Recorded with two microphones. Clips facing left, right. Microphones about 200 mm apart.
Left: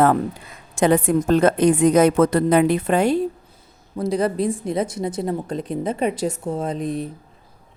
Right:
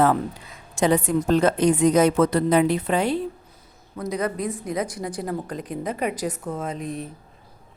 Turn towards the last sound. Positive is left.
turn(degrees=35)  # may be behind; listen again after turning